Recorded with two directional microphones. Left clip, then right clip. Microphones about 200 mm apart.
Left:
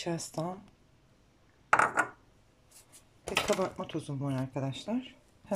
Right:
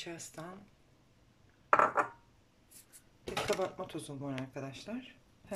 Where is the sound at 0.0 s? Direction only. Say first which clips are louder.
Left 9 dB; 25° left (ahead or behind).